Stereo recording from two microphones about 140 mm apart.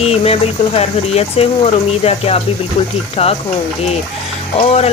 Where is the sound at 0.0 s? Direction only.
45° left (ahead or behind).